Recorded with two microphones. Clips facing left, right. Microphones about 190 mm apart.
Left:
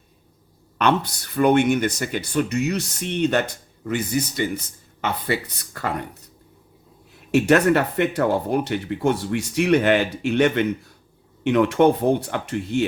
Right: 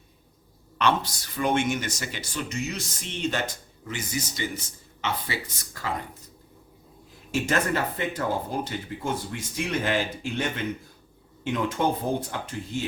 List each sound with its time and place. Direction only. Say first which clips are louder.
0.8 s speech: left 4 dB; 60° left (ahead or behind)
7.3 s speech: left 9 dB; 65° left (ahead or behind)